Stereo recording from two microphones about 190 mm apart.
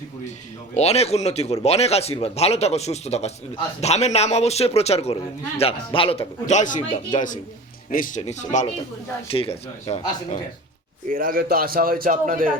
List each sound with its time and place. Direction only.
0.7 s a man's voice: 35° left (ahead or behind)
11.1 s a man's voice: 50° right (ahead or behind)